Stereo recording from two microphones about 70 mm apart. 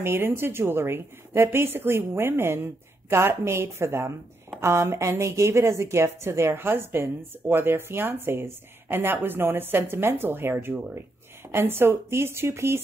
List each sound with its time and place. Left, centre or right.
0.0 s a woman's voice: right